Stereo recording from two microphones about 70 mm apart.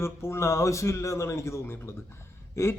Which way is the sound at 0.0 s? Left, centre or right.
Left.